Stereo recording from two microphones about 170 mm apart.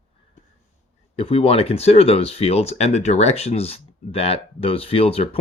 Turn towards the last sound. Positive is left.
turn(degrees=35)  # may be behind; listen again after turning